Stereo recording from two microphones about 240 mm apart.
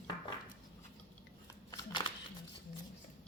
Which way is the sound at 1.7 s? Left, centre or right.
Centre.